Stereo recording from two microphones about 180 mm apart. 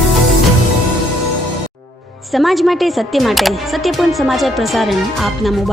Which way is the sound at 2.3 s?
Centre (ahead or behind).